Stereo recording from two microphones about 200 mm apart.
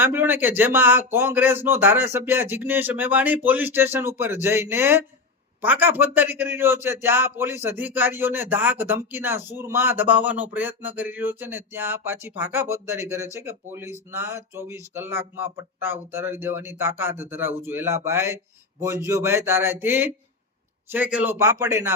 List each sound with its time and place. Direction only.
0.0 s speech: 10° right (ahead or behind)